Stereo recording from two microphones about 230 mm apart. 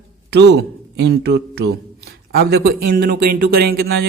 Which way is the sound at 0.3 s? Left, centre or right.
Right.